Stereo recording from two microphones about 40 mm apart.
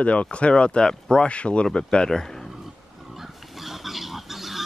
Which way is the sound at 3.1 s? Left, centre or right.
Centre.